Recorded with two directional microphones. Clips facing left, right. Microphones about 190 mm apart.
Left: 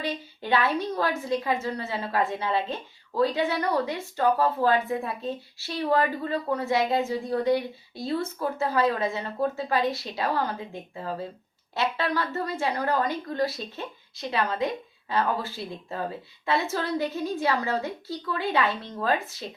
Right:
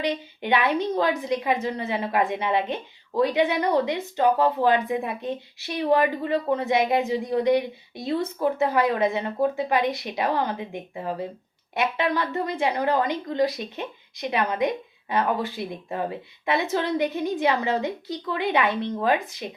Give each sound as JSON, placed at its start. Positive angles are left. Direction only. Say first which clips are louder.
{"t": 0.0, "sound": "a woman's voice", "louder": "right 5 dB", "side_deg": -20}